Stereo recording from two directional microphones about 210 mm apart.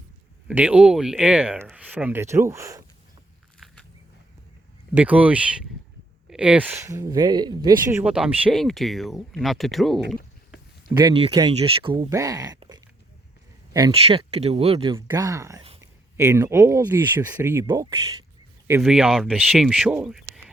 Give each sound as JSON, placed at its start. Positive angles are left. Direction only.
{"t": 0.4, "sound": "speech", "side_deg": -5}
{"t": 4.9, "sound": "speech", "side_deg": -5}
{"t": 10.8, "sound": "speech", "side_deg": -20}
{"t": 18.7, "sound": "speech", "side_deg": -5}